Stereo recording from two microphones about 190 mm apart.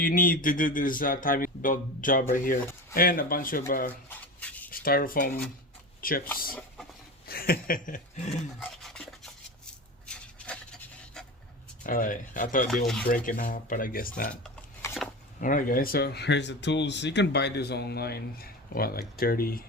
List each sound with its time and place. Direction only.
0.0 s speech: 45° left (ahead or behind)
4.1 s rub: 10° left (ahead or behind)
4.8 s speech: 50° left (ahead or behind)
6.5 s a sound: centre (ahead or behind)
7.3 s a sound: 50° left (ahead or behind)
8.6 s a sound: centre (ahead or behind)
11.8 s speech: 45° left (ahead or behind)
12.6 s speech: centre (ahead or behind)
13.1 s speech: 45° left (ahead or behind)
15.4 s speech: 45° left (ahead or behind)